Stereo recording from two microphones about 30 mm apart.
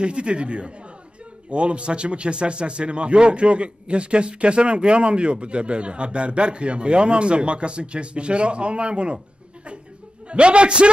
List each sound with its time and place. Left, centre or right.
0.0 s speech: right
10.2 s speech: right